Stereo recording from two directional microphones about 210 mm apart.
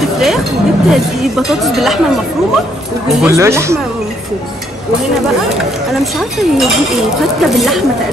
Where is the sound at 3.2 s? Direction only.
15° right (ahead or behind).